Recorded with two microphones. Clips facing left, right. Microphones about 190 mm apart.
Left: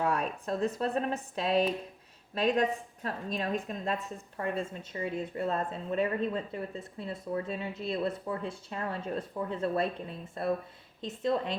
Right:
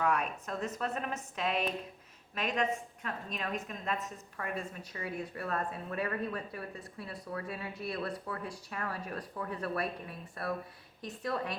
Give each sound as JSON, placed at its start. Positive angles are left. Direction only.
{"t": 0.0, "sound": "a woman's voice", "side_deg": 30}